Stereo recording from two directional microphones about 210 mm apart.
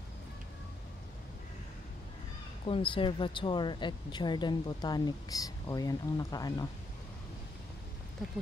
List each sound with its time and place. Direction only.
2.6 s speech: 25° left (ahead or behind)